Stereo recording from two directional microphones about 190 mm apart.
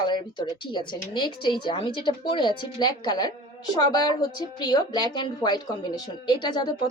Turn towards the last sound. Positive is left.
turn(degrees=20)  # may be behind; listen again after turning